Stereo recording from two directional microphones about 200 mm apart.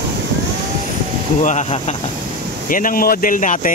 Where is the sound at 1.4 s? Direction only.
35° left (ahead or behind).